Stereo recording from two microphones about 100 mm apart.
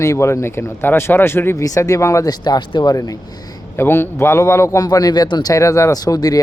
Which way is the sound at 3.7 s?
25° left (ahead or behind).